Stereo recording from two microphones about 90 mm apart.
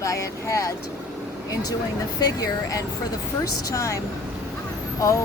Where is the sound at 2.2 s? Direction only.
45° left (ahead or behind).